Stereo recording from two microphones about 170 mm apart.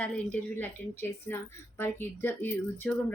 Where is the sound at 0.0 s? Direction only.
10° left (ahead or behind).